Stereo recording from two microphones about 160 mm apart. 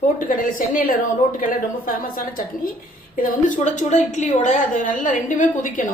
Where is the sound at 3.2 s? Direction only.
55° left (ahead or behind).